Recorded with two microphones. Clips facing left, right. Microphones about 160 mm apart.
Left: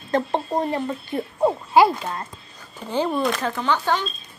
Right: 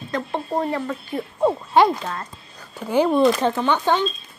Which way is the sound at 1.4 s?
5° left (ahead or behind).